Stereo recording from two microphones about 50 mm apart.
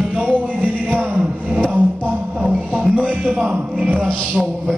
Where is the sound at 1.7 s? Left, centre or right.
Right.